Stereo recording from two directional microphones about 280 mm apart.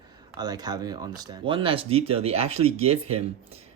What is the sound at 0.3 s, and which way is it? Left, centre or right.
Speech, centre.